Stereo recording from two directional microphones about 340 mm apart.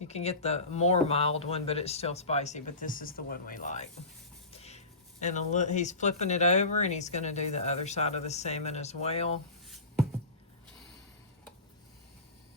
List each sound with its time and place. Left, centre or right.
0.1 s speech: centre
4.5 s a sound: centre
5.2 s speech: left